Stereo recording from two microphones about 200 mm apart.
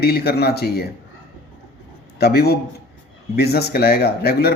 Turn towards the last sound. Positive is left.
turn(degrees=50)  # may be behind; listen again after turning